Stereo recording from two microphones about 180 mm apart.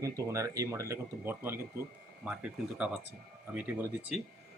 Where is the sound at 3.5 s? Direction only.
10° right (ahead or behind).